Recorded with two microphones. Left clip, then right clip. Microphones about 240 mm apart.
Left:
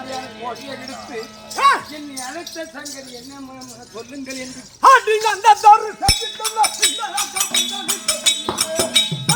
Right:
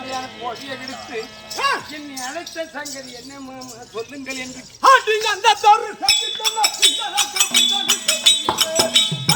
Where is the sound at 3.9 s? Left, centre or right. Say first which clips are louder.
Right 2 dB; centre.